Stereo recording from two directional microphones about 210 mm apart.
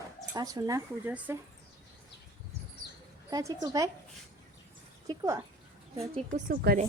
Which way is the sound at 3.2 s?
15° right (ahead or behind).